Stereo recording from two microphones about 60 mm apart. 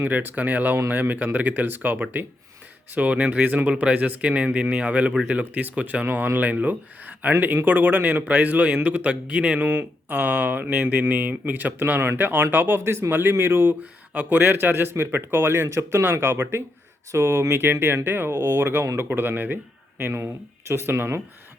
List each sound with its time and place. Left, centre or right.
0.0 s speech: right
9.6 s speech: right
14.1 s speech: right